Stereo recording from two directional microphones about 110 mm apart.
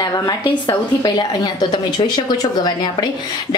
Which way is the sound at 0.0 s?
35° left (ahead or behind).